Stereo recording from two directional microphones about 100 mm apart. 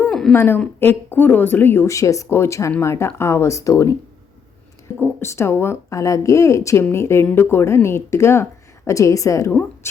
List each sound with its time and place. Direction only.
0.1 s a sound: 5° left (ahead or behind)
0.3 s speech: 20° left (ahead or behind)
4.9 s speech: 25° left (ahead or behind)